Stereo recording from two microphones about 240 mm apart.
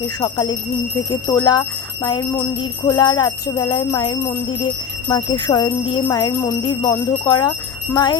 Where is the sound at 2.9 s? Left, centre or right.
Centre.